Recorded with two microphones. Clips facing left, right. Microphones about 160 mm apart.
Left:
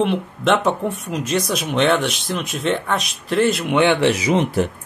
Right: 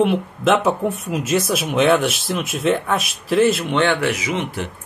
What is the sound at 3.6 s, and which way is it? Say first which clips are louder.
Speech: left 2 dB; 10° left (ahead or behind).